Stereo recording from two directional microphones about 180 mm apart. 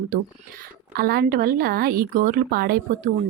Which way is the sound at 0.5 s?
55° right (ahead or behind).